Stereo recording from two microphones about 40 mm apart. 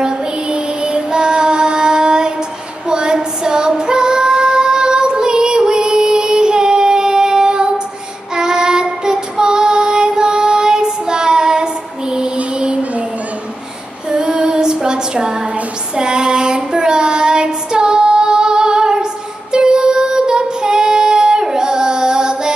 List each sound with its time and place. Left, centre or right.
0.0 s child singing: right
2.9 s female singing: right
8.4 s child singing: centre
12.4 s music: right
14.1 s female singing: right
14.6 s a sound: centre
16.0 s female singing: right
16.7 s child singing: right